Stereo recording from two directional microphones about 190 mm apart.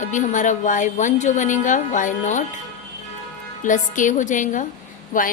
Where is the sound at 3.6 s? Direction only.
40° left (ahead or behind).